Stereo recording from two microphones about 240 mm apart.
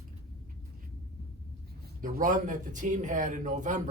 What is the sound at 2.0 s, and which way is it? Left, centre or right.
Speech, right.